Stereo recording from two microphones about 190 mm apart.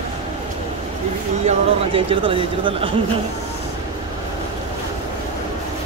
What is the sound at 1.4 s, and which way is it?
Speech, 30° right (ahead or behind).